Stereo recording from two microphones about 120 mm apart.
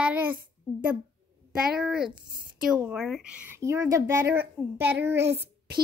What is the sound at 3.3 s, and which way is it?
Speech, 15° right (ahead or behind).